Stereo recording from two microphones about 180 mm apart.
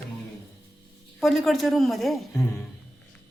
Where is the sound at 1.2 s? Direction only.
Centre (ahead or behind).